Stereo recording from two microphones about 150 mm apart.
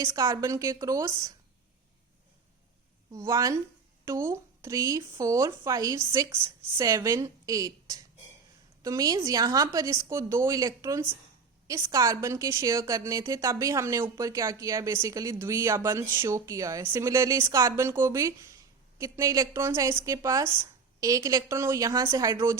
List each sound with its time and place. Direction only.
0.0 s speech: 20° right (ahead or behind)
3.1 s speech: 20° right (ahead or behind)